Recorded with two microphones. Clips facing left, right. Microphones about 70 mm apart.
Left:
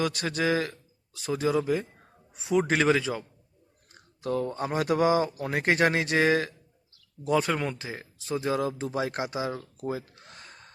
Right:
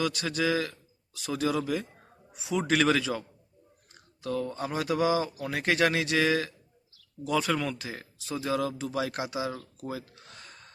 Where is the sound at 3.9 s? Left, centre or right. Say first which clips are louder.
Left 3 dB; left.